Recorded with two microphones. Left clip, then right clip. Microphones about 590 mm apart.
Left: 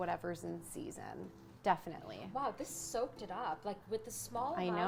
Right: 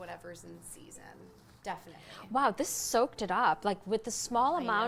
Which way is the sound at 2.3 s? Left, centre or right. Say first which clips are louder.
Right 11 dB; right.